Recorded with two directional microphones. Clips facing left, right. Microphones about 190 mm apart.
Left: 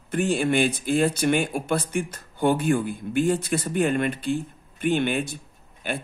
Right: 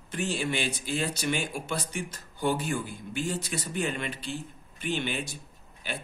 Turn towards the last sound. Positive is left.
turn(degrees=55)  # may be behind; listen again after turning